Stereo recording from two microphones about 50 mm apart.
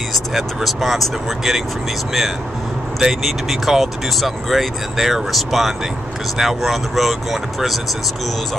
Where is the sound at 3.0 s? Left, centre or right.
Centre.